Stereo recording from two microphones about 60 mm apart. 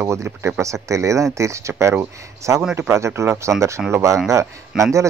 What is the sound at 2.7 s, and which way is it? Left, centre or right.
Speech, right.